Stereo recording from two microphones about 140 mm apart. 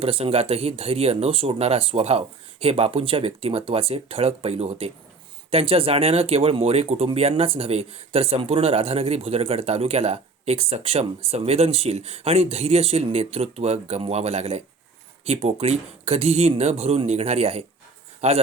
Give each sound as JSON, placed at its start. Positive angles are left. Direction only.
{"t": 0.0, "sound": "speech", "side_deg": -45}